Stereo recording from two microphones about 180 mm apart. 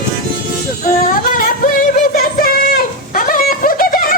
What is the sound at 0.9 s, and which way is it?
Singing, 50° left (ahead or behind).